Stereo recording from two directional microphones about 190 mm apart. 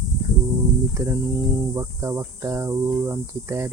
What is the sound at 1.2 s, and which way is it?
Speech, centre (ahead or behind).